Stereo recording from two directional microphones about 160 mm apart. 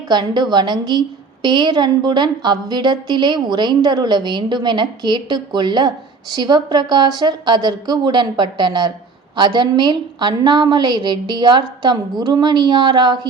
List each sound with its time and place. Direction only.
0.1 s a woman's voice: 25° right (ahead or behind)